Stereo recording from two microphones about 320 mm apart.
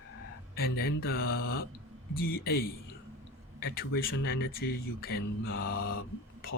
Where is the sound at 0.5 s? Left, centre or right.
Left.